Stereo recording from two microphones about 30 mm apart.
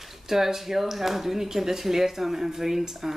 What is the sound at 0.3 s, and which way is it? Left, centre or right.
Speech, centre.